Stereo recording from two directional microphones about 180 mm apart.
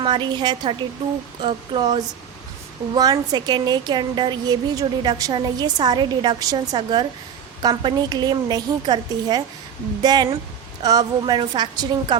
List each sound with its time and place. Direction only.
0.0 s a woman's voice: 25° right (ahead or behind)